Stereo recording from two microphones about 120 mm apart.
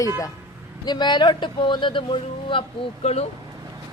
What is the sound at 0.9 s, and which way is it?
Speech, 35° left (ahead or behind).